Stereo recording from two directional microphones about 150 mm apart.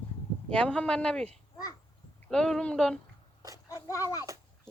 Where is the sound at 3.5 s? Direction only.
20° left (ahead or behind).